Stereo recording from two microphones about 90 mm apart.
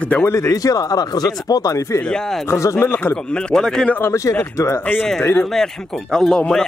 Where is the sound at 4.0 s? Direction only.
30° left (ahead or behind).